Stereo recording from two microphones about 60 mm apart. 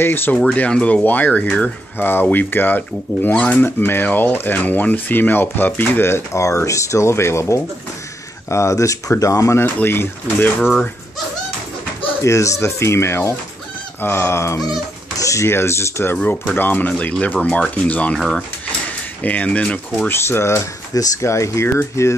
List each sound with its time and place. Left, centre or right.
0.0 s speech: left
0.5 s speech: centre; by 6.4 s left
6.4 s speech: left
9.8 s speech: left
12.2 s speech: left
14.7 s speech: left
15.4 s speech: left
16.5 s speech: left
18.1 s speech: centre
19.2 s speech: left
20.1 s speech: left